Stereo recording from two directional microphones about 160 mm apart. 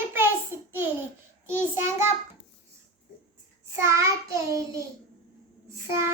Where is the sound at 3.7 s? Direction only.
20° right (ahead or behind).